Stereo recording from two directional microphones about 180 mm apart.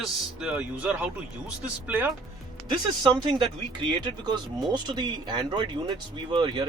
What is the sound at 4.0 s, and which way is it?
Speech, 25° right (ahead or behind).